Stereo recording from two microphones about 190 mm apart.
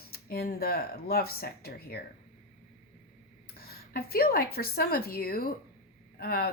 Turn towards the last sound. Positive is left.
turn(degrees=55)  # may be behind; listen again after turning